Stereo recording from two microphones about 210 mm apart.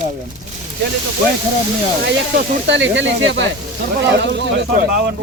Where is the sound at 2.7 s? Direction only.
60° right (ahead or behind).